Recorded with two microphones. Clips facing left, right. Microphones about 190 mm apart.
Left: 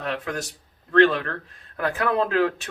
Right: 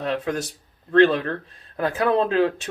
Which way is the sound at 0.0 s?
25° right (ahead or behind).